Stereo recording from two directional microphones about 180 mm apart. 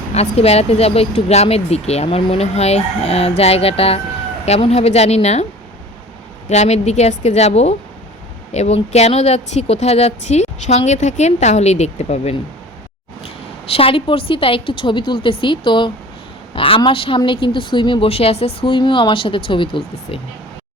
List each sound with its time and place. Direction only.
0.1 s speech: 35° left (ahead or behind)
6.5 s speech: 40° left (ahead or behind)
13.7 s speech: 30° left (ahead or behind)